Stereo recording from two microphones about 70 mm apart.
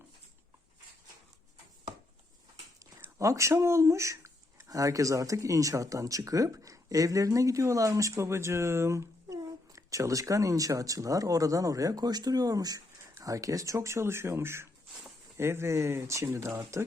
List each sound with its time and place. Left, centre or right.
3.2 s speech: right
13.1 s speech: right